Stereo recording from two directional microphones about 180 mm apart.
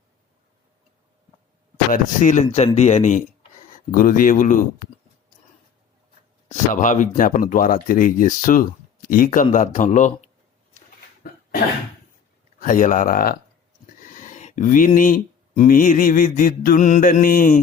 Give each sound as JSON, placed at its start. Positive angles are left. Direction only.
{"t": 1.9, "sound": "speech", "side_deg": 45}
{"t": 6.5, "sound": "speech", "side_deg": 45}
{"t": 11.2, "sound": "cough", "side_deg": 55}
{"t": 12.5, "sound": "speech", "side_deg": 50}